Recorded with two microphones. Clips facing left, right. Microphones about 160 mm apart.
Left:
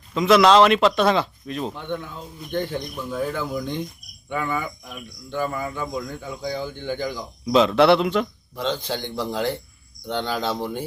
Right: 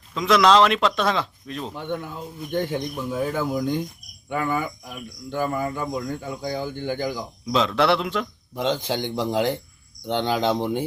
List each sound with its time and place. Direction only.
0.1 s speech: 5° left (ahead or behind)
1.7 s speech: 10° right (ahead or behind)
7.4 s speech: 5° left (ahead or behind)
8.5 s speech: 15° right (ahead or behind)